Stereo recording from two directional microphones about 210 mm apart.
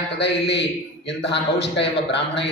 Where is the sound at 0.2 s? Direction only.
55° left (ahead or behind).